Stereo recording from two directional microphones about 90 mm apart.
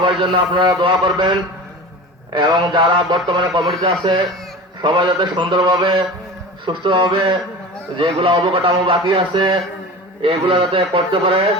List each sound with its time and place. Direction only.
0.0 s a man's voice: 60° right (ahead or behind)
10.2 s speech: 85° right